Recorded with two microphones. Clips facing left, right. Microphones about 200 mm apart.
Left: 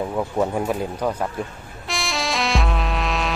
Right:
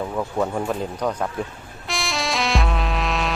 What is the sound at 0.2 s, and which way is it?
Speech, 10° left (ahead or behind).